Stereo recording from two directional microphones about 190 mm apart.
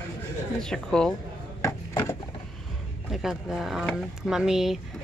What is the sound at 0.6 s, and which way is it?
Speech, 5° left (ahead or behind).